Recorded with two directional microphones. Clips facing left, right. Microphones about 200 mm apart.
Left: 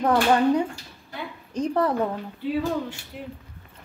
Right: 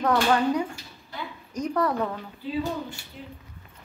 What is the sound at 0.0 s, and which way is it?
Speech, 25° left (ahead or behind).